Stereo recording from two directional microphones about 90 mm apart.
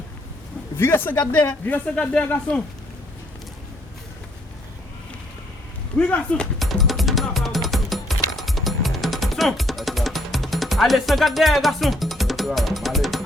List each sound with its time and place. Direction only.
0.8 s speech: 25° left (ahead or behind)
6.0 s speech: 15° left (ahead or behind)
6.6 s music: centre (ahead or behind)